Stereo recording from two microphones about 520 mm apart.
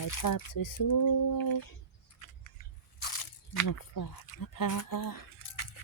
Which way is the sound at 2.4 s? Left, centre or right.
Left.